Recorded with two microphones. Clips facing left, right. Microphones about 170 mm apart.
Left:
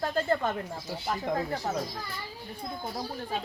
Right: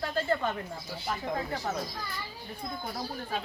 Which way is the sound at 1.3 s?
30° left (ahead or behind).